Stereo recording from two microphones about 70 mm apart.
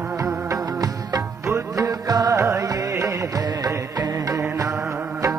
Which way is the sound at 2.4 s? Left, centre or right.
Right.